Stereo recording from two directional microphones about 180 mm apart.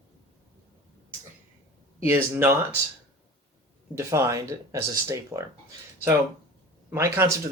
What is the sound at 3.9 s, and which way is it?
Speech, 15° right (ahead or behind).